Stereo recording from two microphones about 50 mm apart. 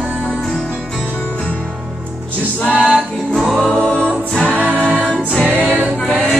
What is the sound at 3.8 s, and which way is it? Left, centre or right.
Music, centre.